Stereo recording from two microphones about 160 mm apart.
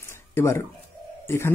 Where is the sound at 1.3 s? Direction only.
15° left (ahead or behind).